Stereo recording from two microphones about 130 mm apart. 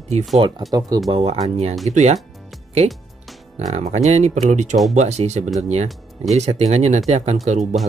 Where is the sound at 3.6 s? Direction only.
55° right (ahead or behind).